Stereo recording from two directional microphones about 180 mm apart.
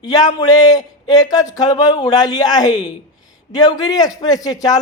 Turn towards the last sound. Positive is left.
turn(degrees=20)  # may be behind; listen again after turning